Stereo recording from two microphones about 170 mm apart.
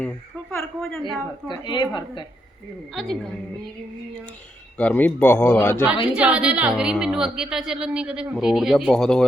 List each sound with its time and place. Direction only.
0.0 s a sound: 5° left (ahead or behind)
1.5 s a woman's voice: 25° left (ahead or behind)
2.9 s a man's voice: centre (ahead or behind)
4.8 s a man's voice: 10° left (ahead or behind)
6.1 s a woman's voice: 5° right (ahead or behind)